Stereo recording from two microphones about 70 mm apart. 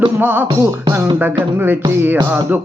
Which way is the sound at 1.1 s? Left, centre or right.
Right.